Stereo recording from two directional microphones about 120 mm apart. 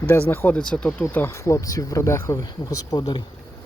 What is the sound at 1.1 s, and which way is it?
Speech, 20° left (ahead or behind).